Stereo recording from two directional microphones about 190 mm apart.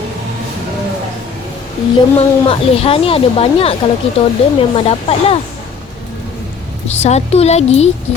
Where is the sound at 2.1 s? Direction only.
30° left (ahead or behind).